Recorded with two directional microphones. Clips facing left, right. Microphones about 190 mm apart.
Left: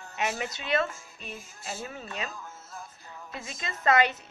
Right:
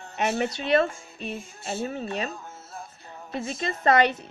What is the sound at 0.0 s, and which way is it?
Speech, 30° right (ahead or behind).